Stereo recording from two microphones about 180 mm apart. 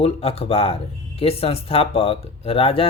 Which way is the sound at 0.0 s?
35° left (ahead or behind).